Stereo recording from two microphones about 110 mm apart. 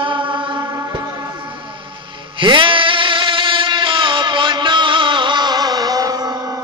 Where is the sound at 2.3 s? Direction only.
50° right (ahead or behind).